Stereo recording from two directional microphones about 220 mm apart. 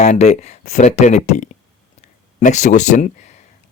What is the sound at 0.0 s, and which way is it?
Speech, 30° left (ahead or behind).